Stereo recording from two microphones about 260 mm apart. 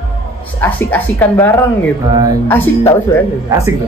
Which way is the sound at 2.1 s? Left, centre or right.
Centre.